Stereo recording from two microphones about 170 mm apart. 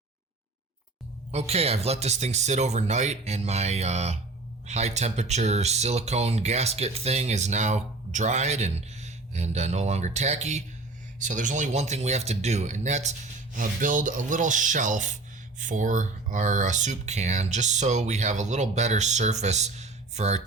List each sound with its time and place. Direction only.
1.3 s speech: 35° right (ahead or behind)